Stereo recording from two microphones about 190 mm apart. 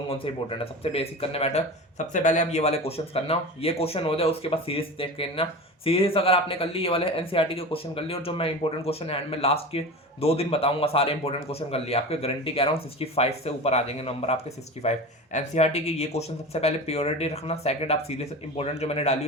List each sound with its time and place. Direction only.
0.1 s speech: 30° left (ahead or behind)